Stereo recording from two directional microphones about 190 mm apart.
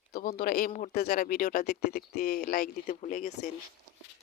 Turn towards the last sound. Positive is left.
turn(degrees=40)  # may be behind; listen again after turning